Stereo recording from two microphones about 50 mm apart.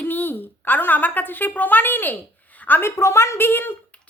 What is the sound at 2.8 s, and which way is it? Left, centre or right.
Speech, left.